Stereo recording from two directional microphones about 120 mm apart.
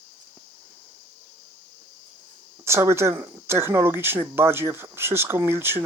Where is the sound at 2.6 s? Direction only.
20° right (ahead or behind).